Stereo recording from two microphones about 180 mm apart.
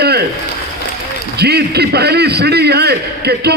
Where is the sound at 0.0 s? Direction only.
65° right (ahead or behind).